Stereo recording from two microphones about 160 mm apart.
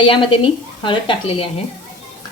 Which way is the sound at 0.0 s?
30° left (ahead or behind).